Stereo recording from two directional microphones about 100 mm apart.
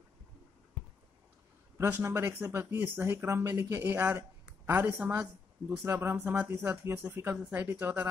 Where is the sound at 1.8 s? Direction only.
25° right (ahead or behind).